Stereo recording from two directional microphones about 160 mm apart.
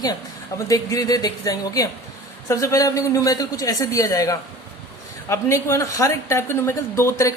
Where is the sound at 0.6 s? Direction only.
20° left (ahead or behind).